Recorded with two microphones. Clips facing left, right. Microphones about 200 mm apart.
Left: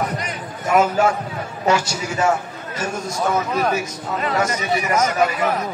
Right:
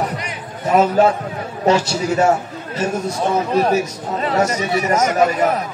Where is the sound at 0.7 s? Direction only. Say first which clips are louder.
Right 3 dB; 30° right (ahead or behind).